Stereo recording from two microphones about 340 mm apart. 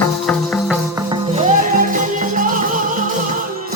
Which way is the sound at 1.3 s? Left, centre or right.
Right.